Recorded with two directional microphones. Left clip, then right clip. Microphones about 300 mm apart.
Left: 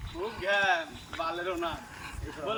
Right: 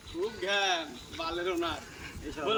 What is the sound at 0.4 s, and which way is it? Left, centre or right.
Speech, centre.